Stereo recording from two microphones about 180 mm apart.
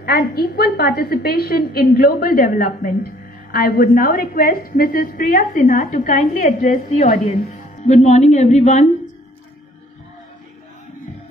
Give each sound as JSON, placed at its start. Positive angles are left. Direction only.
{"t": 0.0, "sound": "a woman's voice", "side_deg": 60}